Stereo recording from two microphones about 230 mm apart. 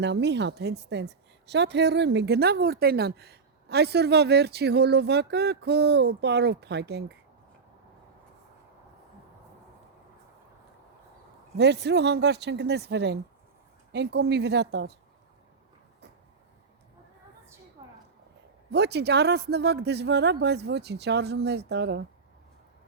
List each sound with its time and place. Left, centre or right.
0.0 s a woman's voice: right
11.5 s a woman's voice: right
18.7 s a woman's voice: right